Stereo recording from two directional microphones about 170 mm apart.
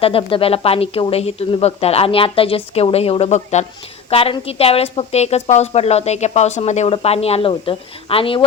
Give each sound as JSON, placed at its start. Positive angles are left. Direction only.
{"t": 0.0, "sound": "a woman's voice", "side_deg": 30}